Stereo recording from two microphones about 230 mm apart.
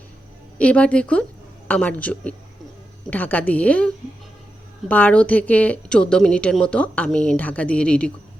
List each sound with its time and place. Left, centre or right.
0.6 s a woman's voice: centre